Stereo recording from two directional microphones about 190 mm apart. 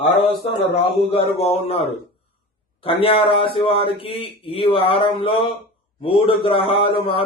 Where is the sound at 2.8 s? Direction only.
30° left (ahead or behind).